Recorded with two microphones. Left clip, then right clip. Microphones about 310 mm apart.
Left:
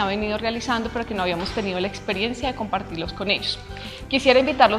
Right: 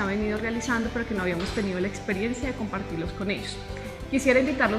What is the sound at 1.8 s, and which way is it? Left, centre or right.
Speech, left.